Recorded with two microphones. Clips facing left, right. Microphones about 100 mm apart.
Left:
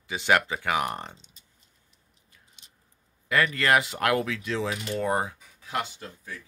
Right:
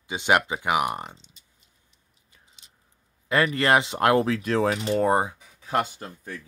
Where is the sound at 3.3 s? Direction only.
30° right (ahead or behind).